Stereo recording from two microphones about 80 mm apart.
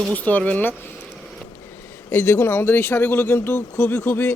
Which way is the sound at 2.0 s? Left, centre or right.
Left.